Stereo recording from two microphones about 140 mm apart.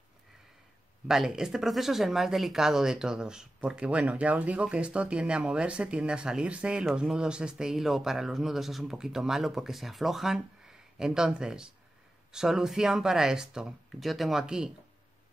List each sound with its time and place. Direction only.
1.0 s speech: 5° right (ahead or behind)